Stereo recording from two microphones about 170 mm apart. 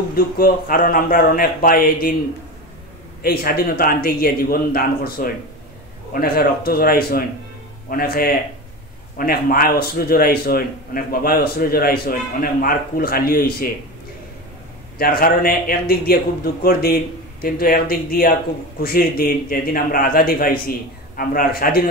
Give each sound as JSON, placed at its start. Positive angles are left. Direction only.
{"t": 0.1, "sound": "a man's voice", "side_deg": 60}
{"t": 3.2, "sound": "a man's voice", "side_deg": 65}
{"t": 15.0, "sound": "a man's voice", "side_deg": 60}